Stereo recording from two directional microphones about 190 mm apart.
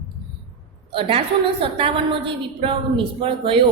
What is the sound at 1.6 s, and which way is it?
Speech, 30° right (ahead or behind).